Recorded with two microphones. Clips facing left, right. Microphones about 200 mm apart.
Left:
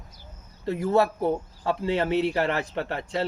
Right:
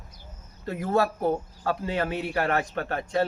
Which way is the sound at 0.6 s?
25° left (ahead or behind).